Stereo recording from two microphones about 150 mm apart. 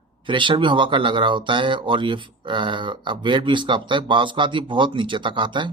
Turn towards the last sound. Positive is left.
turn(degrees=-30)  # may be behind; listen again after turning